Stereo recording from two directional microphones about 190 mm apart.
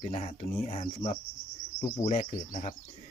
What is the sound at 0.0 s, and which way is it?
Speech, 35° left (ahead or behind).